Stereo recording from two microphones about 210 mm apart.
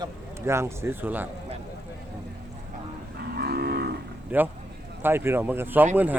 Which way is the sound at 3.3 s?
50° right (ahead or behind).